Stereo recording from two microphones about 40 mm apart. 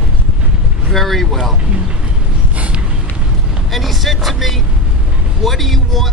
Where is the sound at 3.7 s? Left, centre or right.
Centre.